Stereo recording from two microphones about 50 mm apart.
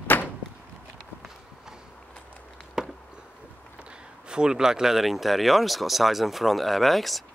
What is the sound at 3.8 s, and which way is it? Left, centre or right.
A man's voice, centre.